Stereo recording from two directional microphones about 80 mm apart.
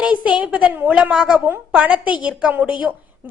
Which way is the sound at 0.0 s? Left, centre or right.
Centre.